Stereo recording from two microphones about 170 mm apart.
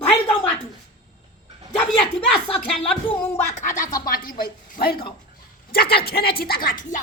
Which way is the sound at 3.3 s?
45° left (ahead or behind).